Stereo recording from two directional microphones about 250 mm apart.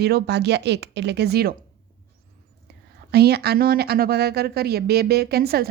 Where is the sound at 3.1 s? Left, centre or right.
Right.